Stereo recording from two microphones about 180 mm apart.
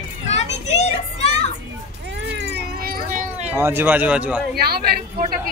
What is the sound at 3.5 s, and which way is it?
Speech, 10° right (ahead or behind).